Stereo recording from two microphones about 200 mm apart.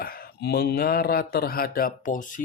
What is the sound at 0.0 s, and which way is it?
Speech, 50° left (ahead or behind).